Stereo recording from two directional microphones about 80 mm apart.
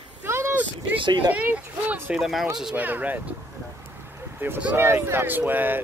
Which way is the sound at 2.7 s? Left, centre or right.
Right.